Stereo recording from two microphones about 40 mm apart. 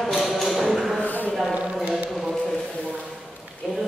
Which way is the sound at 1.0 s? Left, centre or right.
Left.